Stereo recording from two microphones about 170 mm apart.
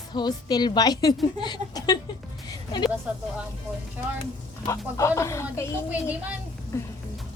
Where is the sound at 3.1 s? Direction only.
5° right (ahead or behind).